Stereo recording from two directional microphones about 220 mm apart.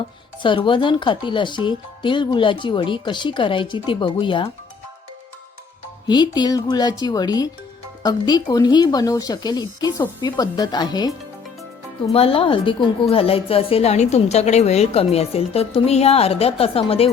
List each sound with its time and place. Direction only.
0.4 s a woman's voice: 20° left (ahead or behind)
6.1 s a woman's voice: 20° left (ahead or behind)
12.1 s a woman's voice: 25° left (ahead or behind)